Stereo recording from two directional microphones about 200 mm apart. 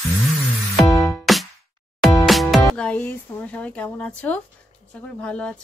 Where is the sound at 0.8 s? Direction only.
15° left (ahead or behind).